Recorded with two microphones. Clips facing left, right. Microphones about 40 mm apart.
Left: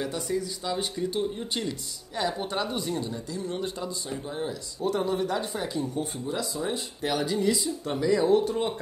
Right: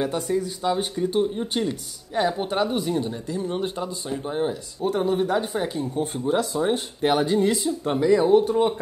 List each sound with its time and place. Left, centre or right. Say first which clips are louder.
0.0 s speech: right 5 dB; right
6.1 s speech: right 8 dB; right
7.8 s speech: right 5 dB; right